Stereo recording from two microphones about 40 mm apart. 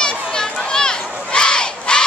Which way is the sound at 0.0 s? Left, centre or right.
Centre.